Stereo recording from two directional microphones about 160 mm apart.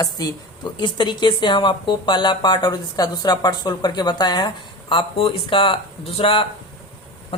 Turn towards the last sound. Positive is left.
turn(degrees=35)  # may be behind; listen again after turning